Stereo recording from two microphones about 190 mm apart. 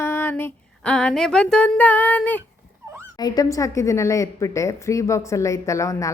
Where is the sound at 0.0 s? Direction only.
10° left (ahead or behind).